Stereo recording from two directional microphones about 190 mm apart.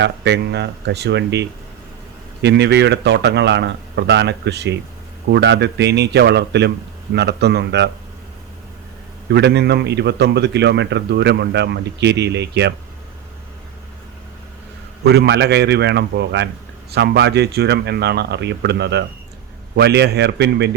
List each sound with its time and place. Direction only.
0.0 s a man's voice: 65° right (ahead or behind)
9.3 s a man's voice: 60° right (ahead or behind)
15.0 s a man's voice: 60° right (ahead or behind)